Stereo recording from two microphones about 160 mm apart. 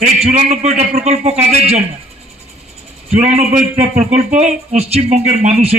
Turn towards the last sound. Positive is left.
turn(degrees=-40)  # may be behind; listen again after turning